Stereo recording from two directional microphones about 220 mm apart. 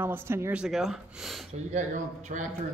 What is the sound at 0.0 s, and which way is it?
Speech, 10° right (ahead or behind).